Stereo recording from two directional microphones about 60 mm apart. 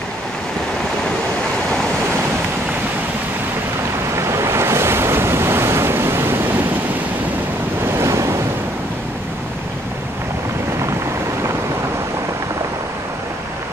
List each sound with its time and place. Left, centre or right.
4.1 s waves: right
8.0 s waves: right